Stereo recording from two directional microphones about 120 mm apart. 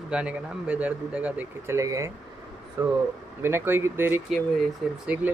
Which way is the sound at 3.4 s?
20° right (ahead or behind).